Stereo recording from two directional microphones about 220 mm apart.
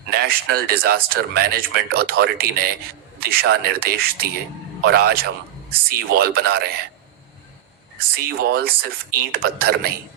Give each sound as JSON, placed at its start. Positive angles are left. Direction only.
{"t": 0.1, "sound": "speech", "side_deg": -45}
{"t": 8.1, "sound": "speech", "side_deg": -45}